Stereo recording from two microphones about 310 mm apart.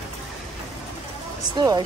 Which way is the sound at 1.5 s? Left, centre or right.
Centre.